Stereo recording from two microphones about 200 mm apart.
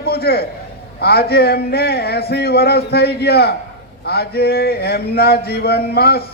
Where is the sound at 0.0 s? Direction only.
50° left (ahead or behind).